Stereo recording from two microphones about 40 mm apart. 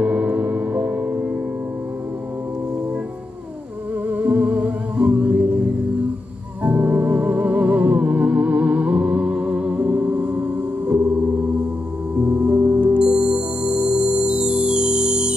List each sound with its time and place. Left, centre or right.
0.0 s gong: right
4.1 s music: right
6.6 s music: right
12.2 s gong: right
13.0 s music: right